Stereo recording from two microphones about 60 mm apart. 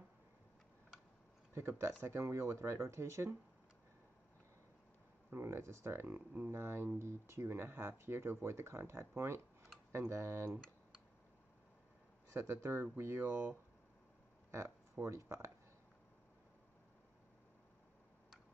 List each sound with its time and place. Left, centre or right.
1.5 s speech: right
5.3 s speech: right
12.4 s speech: right
15.0 s speech: right